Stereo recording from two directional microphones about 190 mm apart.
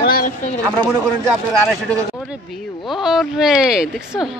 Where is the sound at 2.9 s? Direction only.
Centre (ahead or behind).